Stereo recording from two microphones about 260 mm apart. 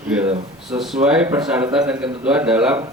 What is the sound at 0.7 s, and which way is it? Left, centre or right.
A man's voice, centre.